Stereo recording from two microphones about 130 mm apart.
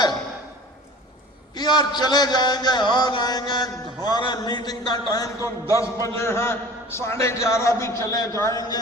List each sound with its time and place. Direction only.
1.5 s a man's voice: 30° left (ahead or behind)